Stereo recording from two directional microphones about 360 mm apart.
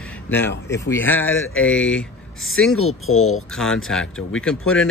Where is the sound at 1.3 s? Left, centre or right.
Left.